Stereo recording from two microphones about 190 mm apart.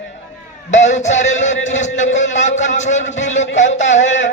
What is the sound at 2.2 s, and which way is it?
Speech, 75° left (ahead or behind).